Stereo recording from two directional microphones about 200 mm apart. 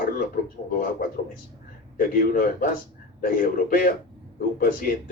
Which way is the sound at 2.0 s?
45° left (ahead or behind).